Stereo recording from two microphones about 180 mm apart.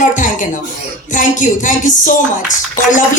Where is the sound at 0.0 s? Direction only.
45° left (ahead or behind).